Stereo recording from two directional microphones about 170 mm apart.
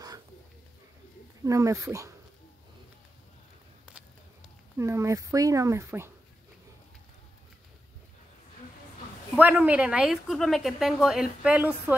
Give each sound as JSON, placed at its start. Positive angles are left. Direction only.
{"t": 1.4, "sound": "speech", "side_deg": -20}
{"t": 4.7, "sound": "speech", "side_deg": -15}
{"t": 9.4, "sound": "a woman's voice", "side_deg": -10}